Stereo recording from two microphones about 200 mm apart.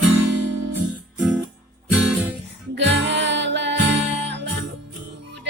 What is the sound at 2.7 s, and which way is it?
Music, 60° right (ahead or behind).